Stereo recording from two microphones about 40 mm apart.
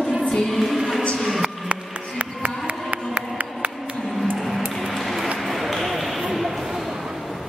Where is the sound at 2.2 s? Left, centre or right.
Right.